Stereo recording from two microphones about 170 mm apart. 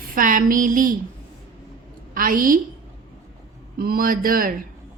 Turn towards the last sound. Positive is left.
turn(degrees=-55)  # may be behind; listen again after turning